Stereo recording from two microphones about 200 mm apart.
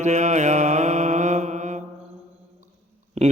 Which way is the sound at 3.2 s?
35° right (ahead or behind).